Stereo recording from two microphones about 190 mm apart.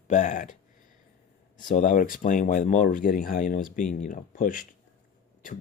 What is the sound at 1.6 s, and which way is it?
Speech, 45° left (ahead or behind).